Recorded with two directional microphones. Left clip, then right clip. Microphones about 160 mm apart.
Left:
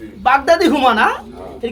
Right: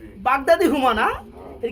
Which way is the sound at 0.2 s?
35° right (ahead or behind).